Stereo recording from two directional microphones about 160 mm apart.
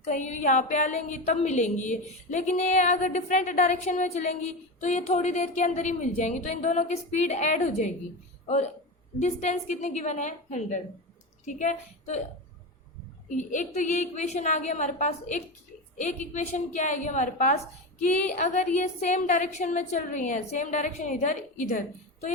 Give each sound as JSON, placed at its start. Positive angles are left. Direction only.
{"t": 0.0, "sound": "a woman's voice", "side_deg": 45}
{"t": 13.2, "sound": "a woman's voice", "side_deg": 50}